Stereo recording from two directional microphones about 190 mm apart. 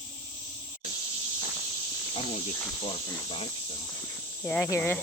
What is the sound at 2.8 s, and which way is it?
Snake, 25° left (ahead or behind).